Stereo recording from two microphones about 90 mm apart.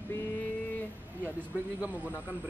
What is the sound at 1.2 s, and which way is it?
Speech, 15° right (ahead or behind).